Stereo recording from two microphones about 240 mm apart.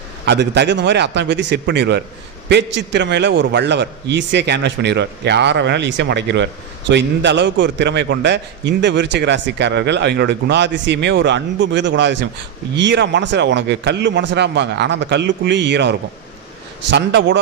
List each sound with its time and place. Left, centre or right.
0.3 s a man's voice: right